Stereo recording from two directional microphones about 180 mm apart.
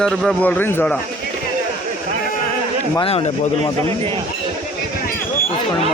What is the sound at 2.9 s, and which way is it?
Speech, 30° left (ahead or behind).